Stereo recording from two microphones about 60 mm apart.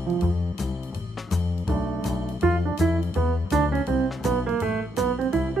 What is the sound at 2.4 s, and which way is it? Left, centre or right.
Music, centre.